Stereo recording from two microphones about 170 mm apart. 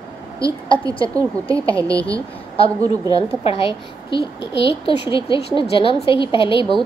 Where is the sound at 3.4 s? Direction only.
35° left (ahead or behind).